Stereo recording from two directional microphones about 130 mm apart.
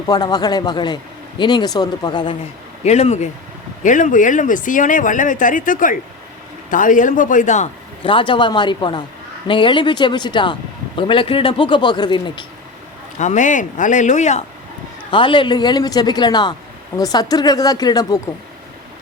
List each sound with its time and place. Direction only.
0.1 s speech: 30° left (ahead or behind)
2.8 s speech: 60° left (ahead or behind)
3.8 s a man's voice: 85° left; by 7.7 s 65° left (ahead or behind)
8.0 s speech: 40° left (ahead or behind)
13.1 s speech: 70° left (ahead or behind)
15.1 s speech: 40° left (ahead or behind)